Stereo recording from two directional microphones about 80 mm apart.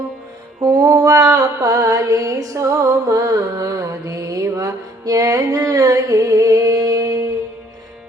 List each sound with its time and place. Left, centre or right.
0.6 s mantra: right